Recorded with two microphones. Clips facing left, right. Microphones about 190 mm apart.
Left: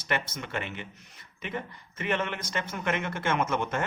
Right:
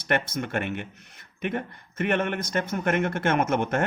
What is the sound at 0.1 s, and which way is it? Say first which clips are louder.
Speech: right 6 dB; 55° right (ahead or behind).